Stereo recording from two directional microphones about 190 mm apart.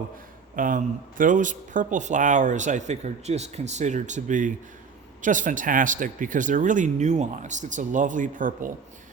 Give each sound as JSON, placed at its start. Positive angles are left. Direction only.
{"t": 0.5, "sound": "speech", "side_deg": -45}